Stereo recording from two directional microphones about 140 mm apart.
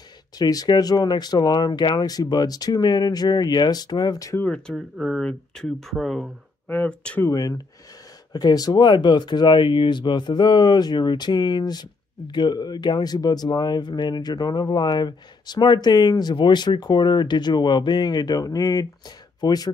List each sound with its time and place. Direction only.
0.4 s speech: 25° left (ahead or behind)
4.4 s speech: 5° left (ahead or behind)
4.7 s speech: 5° right (ahead or behind)
7.2 s speech: 25° left (ahead or behind)